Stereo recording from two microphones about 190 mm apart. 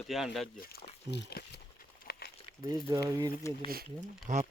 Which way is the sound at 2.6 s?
20° right (ahead or behind).